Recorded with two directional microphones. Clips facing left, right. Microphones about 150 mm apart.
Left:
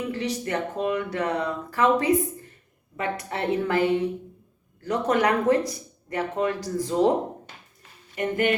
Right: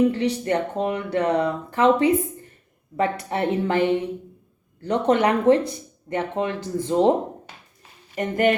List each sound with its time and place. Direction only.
0.0 s speech: 30° right (ahead or behind)
8.1 s speech: 40° right (ahead or behind)